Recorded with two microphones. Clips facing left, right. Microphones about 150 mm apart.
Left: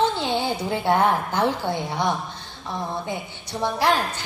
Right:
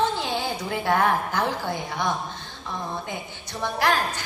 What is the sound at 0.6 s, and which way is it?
Speech, 20° left (ahead or behind).